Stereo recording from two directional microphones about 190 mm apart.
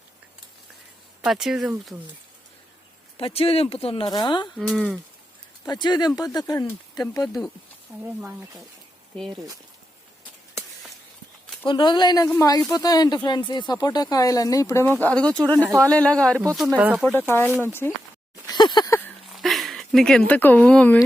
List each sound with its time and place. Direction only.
1.2 s speech: centre (ahead or behind)
3.2 s speech: 30° left (ahead or behind)
4.5 s speech: centre (ahead or behind)
5.6 s speech: 20° left (ahead or behind)
8.0 s speech: 10° right (ahead or behind)
11.6 s speech: 25° left (ahead or behind); by 15.6 s 5° left (ahead or behind)
15.6 s speech: 15° right (ahead or behind)
15.9 s speech: 5° left (ahead or behind)
17.1 s speech: 10° left (ahead or behind)
18.4 s a sound: 25° left (ahead or behind)
18.9 s a sound: 5° left (ahead or behind)